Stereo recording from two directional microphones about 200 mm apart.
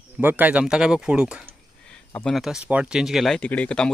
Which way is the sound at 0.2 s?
10° right (ahead or behind).